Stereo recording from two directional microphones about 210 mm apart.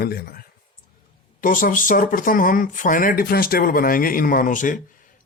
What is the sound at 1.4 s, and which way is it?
Speech, 40° left (ahead or behind).